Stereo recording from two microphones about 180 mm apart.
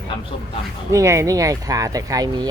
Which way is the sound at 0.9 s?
15° right (ahead or behind).